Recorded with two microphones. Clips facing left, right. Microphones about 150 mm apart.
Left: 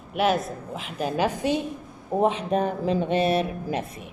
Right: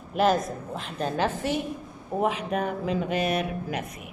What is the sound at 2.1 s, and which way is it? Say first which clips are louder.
Speech: left 4 dB; 30° left (ahead or behind).